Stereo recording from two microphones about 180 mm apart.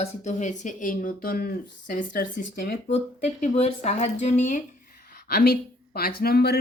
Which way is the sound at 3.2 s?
40° left (ahead or behind).